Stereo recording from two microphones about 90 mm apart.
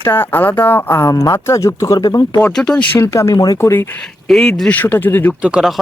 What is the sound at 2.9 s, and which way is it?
Speech, 35° left (ahead or behind).